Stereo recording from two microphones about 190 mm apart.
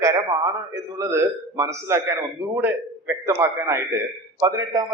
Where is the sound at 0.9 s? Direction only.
15° right (ahead or behind).